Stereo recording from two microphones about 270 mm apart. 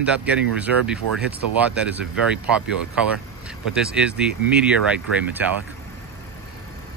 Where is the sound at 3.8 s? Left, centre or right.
Centre.